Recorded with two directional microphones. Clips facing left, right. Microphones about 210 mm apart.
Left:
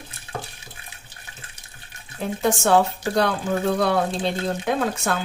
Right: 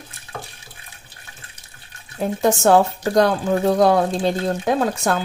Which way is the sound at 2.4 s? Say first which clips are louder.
Right 3 dB; 40° right (ahead or behind).